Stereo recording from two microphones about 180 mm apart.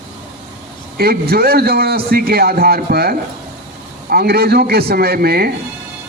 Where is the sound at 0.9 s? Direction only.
60° right (ahead or behind).